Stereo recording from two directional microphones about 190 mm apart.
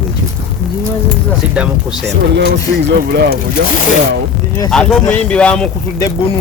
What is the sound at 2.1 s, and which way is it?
Speech, 65° right (ahead or behind).